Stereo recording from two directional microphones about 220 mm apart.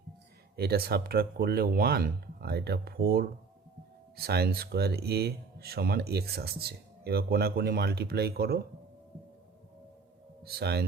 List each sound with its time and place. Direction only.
0.5 s speech: 45° right (ahead or behind)
10.4 s speech: 45° right (ahead or behind)